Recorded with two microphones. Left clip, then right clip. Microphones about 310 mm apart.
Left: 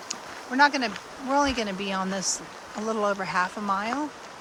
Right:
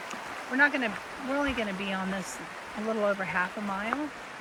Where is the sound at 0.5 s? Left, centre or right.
Centre.